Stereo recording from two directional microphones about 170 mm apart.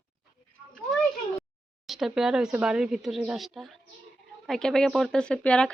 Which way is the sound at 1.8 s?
Centre (ahead or behind).